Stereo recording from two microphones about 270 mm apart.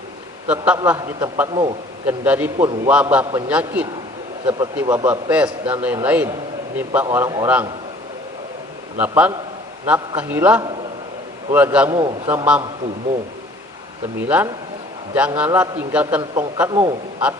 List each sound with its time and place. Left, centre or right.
0.4 s a man's voice: centre
4.4 s a man's voice: centre
9.0 s a man's voice: centre
11.9 s a man's voice: centre
12.3 s a man's voice: centre
14.2 s a man's voice: centre